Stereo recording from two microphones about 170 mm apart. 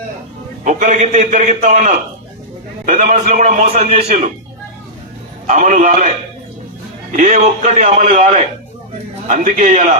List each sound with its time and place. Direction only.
0.6 s a man's voice: 45° right (ahead or behind)
5.5 s a man's voice: 45° right (ahead or behind)
7.1 s a man's voice: 45° right (ahead or behind)